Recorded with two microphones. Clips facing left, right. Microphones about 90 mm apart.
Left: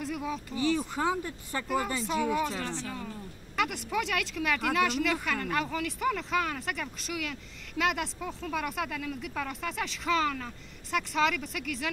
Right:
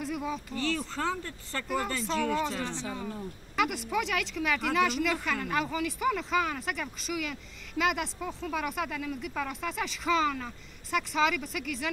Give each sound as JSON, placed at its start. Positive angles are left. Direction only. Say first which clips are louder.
{"t": 0.0, "sound": "speech", "louder": "even", "side_deg": 0}
{"t": 0.6, "sound": "speech", "louder": "left 5 dB", "side_deg": 15}
{"t": 2.6, "sound": "speech", "louder": "right 1 dB", "side_deg": -20}
{"t": 3.5, "sound": "speech", "louder": "right 1 dB", "side_deg": 0}